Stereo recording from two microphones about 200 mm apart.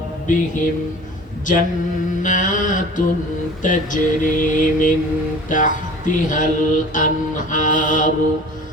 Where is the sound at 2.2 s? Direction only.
40° left (ahead or behind).